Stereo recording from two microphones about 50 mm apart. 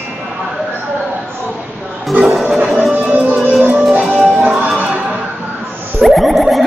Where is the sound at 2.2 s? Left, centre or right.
Centre.